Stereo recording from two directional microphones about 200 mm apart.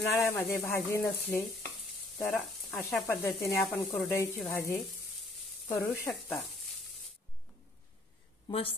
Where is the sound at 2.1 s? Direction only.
10° left (ahead or behind).